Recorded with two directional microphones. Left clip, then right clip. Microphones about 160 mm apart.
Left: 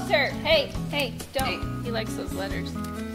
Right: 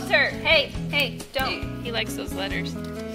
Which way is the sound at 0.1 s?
30° left (ahead or behind).